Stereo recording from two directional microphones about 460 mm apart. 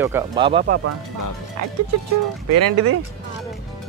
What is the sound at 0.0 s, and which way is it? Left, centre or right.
Speech, centre.